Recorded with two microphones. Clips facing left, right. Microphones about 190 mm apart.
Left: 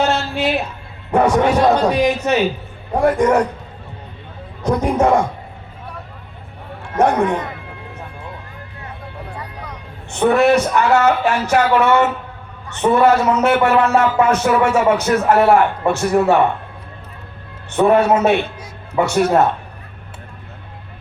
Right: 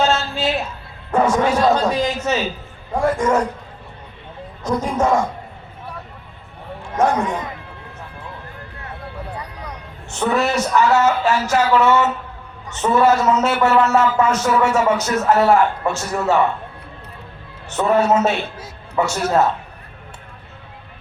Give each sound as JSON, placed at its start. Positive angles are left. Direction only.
{"t": 0.0, "sound": "a sound", "side_deg": 60}
{"t": 1.1, "sound": "a man's voice", "side_deg": 60}
{"t": 4.6, "sound": "a man's voice", "side_deg": 60}
{"t": 6.9, "sound": "speech", "side_deg": 60}
{"t": 10.1, "sound": "a man's voice", "side_deg": 55}
{"t": 17.7, "sound": "a man's voice", "side_deg": 60}